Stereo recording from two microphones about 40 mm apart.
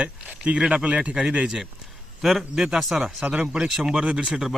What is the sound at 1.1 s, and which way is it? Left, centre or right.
Speech, centre.